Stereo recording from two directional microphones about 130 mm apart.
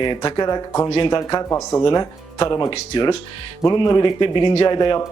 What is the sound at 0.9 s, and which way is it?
Speech, 40° left (ahead or behind).